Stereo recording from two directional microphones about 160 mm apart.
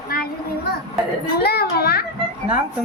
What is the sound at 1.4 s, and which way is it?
Speech, 80° left.